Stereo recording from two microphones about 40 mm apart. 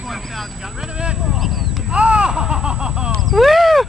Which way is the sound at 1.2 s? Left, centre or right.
Centre.